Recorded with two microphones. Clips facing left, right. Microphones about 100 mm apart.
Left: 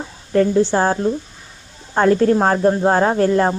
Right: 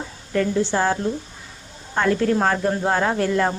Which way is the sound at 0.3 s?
35° left (ahead or behind).